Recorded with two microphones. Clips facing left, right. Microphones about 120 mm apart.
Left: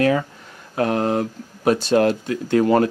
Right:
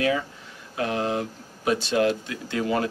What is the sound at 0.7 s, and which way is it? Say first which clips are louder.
Speech: left 6 dB; 50° left (ahead or behind).